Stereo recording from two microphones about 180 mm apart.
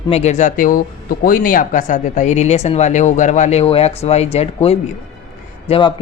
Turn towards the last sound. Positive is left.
turn(degrees=30)  # may be behind; listen again after turning